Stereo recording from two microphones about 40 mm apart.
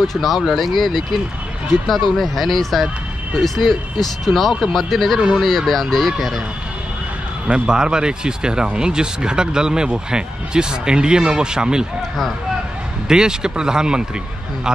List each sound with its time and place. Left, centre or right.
0.0 s speech: centre
7.5 s speech: right
13.1 s speech: centre